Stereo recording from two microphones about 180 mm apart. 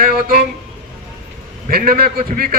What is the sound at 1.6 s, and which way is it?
Speech, 55° right (ahead or behind).